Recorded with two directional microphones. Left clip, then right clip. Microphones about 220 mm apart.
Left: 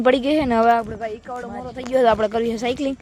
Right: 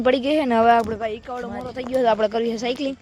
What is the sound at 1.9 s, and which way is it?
Speech, 15° left (ahead or behind).